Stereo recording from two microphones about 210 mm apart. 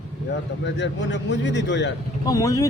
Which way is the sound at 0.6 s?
60° left (ahead or behind).